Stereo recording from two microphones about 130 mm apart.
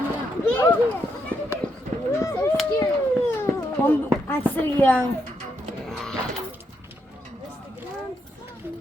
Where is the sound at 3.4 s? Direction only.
15° left (ahead or behind).